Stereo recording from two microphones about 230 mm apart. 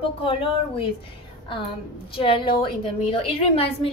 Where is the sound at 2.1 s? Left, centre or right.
Left.